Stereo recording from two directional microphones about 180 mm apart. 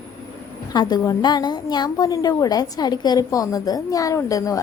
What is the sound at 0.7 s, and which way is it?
A woman's voice, 20° left (ahead or behind).